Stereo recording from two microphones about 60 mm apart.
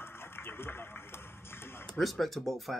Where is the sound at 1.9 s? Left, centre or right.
Centre.